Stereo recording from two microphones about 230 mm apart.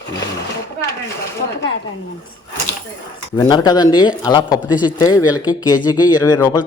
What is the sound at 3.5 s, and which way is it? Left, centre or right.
Speech, centre.